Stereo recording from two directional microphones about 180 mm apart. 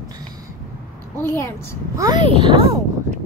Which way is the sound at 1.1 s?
10° left (ahead or behind).